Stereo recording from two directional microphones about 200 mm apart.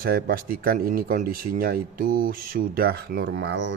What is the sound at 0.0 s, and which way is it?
Speech, 50° right (ahead or behind).